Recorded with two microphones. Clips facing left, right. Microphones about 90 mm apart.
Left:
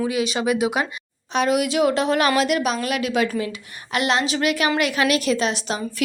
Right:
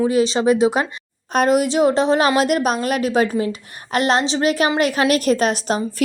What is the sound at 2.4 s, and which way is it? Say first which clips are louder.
A woman's voice: right 3 dB; 45° right (ahead or behind).